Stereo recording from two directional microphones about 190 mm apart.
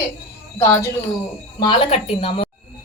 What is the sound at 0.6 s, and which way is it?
Speech, 15° left (ahead or behind).